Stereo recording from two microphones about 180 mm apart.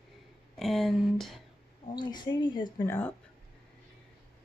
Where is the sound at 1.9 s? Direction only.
25° left (ahead or behind).